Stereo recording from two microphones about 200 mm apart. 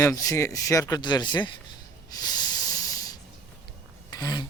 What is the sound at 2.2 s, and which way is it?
Hiss, 20° left (ahead or behind).